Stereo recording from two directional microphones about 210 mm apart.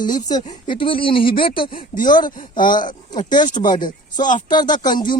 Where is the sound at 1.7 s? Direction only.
40° left (ahead or behind).